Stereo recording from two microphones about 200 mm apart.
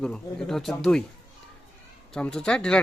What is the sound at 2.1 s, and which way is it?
Speech, 5° left (ahead or behind).